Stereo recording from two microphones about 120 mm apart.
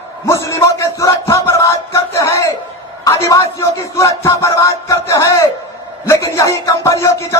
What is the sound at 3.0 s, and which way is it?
A woman's voice, 25° left (ahead or behind).